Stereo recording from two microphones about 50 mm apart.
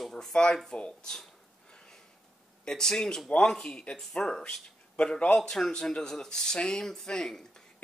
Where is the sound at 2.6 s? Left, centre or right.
Centre.